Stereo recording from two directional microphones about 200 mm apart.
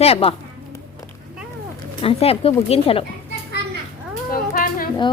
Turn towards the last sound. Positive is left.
turn(degrees=45)  # may be behind; listen again after turning